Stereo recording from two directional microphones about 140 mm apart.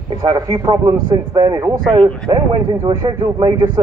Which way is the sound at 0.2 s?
25° right (ahead or behind).